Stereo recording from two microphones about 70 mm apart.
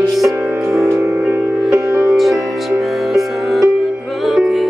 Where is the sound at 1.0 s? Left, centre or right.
Right.